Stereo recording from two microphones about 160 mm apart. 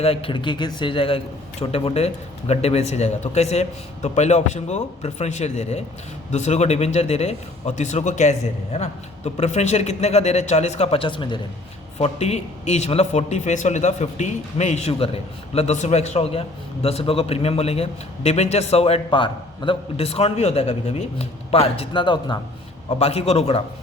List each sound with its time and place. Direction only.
0.0 s a man's voice: 35° left (ahead or behind)
11.9 s a man's voice: 40° left (ahead or behind)
23.0 s a man's voice: 40° left (ahead or behind)